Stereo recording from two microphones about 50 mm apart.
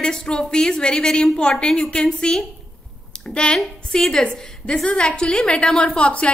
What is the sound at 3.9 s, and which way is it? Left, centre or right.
A woman's voice, centre.